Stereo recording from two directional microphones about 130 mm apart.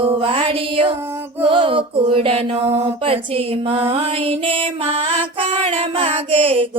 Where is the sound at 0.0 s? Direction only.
45° right (ahead or behind).